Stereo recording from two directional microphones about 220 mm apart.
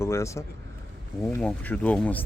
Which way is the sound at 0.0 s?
15° left (ahead or behind).